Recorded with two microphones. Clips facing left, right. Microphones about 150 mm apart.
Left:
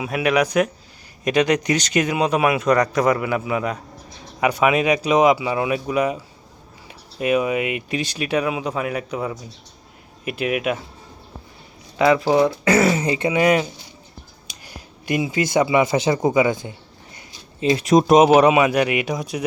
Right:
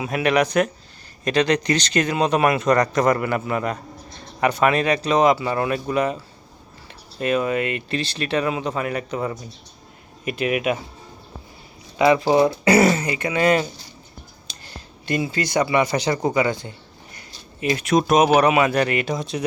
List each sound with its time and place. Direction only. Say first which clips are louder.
0.0 s speech: even; 5° left (ahead or behind)
11.9 s speech: even; 5° right (ahead or behind)
13.1 s speech: left 4 dB; 25° left (ahead or behind)
13.3 s speech: right 1 dB; 10° left (ahead or behind)